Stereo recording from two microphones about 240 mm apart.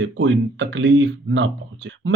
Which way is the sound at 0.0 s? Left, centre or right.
Right.